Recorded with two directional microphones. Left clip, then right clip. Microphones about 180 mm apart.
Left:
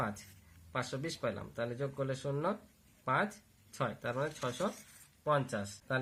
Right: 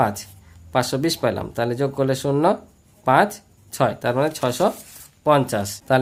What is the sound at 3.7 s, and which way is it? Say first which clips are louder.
Speech: right 17 dB; 45° right (ahead or behind).